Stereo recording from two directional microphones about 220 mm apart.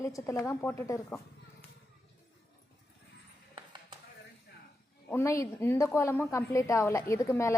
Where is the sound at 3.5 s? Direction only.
20° right (ahead or behind).